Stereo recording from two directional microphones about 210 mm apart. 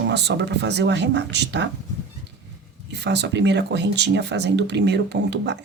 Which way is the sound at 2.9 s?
55° right (ahead or behind).